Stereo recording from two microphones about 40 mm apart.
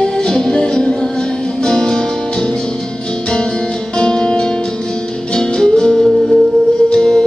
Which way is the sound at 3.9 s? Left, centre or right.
Left.